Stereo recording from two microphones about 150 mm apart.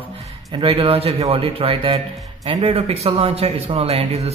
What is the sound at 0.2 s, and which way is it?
Speech, 40° right (ahead or behind).